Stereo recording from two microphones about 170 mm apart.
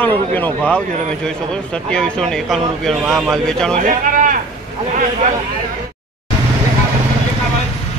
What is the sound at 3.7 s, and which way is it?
Speech, 50° right (ahead or behind).